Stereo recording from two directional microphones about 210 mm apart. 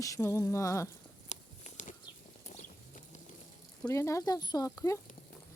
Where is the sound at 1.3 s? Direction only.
35° left (ahead or behind).